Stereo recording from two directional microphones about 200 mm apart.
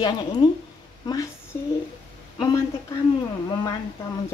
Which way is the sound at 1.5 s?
10° left (ahead or behind).